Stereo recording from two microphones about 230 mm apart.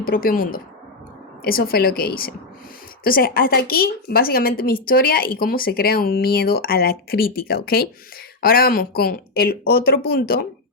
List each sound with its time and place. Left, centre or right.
0.0 s a woman's voice: left